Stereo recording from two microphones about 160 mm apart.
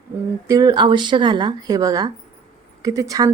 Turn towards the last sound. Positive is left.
turn(degrees=-20)  # may be behind; listen again after turning